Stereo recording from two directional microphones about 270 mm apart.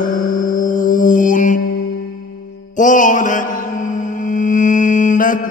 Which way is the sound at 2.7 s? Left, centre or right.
Left.